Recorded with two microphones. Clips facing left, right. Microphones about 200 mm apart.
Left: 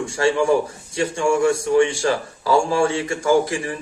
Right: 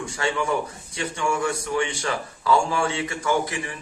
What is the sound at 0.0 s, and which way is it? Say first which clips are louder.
A man's voice: left 7 dB; 25° left (ahead or behind).